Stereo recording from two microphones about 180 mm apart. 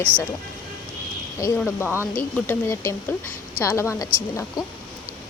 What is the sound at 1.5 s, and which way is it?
A woman's voice, 5° left (ahead or behind).